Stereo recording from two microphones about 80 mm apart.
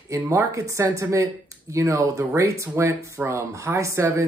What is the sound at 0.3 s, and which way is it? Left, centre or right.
Speech, right.